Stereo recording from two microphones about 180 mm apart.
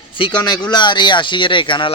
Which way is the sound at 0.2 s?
25° left (ahead or behind).